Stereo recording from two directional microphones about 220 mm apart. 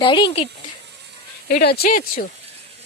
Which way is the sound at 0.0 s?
20° left (ahead or behind).